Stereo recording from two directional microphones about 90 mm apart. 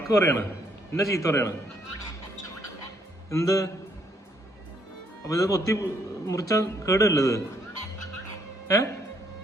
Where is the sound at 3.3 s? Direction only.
35° left (ahead or behind).